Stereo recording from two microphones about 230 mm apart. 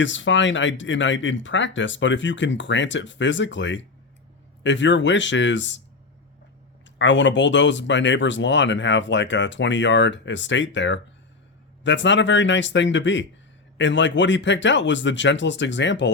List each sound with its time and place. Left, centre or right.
0.0 s speech: left
7.0 s speech: left